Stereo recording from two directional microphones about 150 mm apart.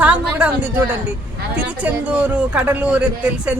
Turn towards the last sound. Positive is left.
turn(degrees=-10)  # may be behind; listen again after turning